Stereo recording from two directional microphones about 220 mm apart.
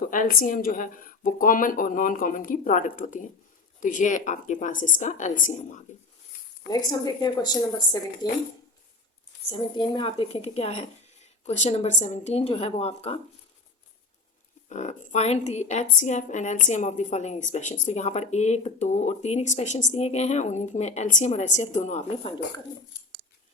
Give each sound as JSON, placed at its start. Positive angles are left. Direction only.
{"t": 0.0, "sound": "a woman's voice", "side_deg": 40}
{"t": 6.7, "sound": "a woman's voice", "side_deg": 15}
{"t": 9.5, "sound": "speech", "side_deg": 20}
{"t": 14.7, "sound": "a woman's voice", "side_deg": 30}